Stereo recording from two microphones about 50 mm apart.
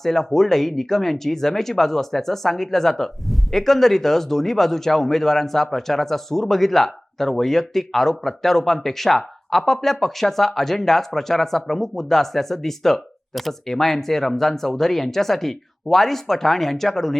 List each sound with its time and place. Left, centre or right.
0.0 s speech: centre